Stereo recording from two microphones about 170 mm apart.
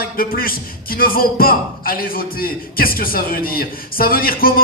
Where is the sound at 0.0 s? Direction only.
60° left (ahead or behind).